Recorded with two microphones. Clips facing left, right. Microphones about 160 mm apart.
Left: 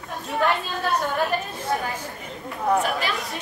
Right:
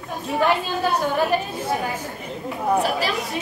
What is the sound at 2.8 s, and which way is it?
Speech, 35° right (ahead or behind).